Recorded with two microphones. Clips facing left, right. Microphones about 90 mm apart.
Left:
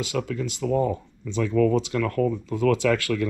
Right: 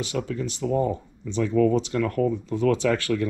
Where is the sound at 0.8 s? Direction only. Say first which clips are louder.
Even; 20° right (ahead or behind).